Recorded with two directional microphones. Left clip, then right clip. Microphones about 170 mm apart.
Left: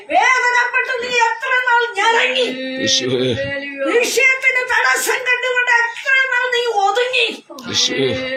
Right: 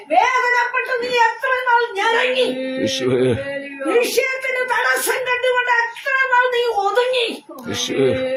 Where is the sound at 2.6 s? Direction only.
55° right (ahead or behind).